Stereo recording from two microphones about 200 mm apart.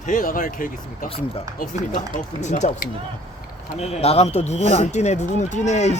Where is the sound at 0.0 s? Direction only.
40° left (ahead or behind).